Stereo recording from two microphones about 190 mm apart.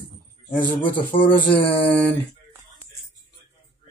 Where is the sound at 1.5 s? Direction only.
10° left (ahead or behind).